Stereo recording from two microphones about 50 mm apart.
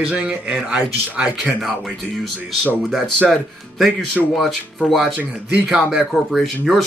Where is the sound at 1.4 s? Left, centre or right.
Centre.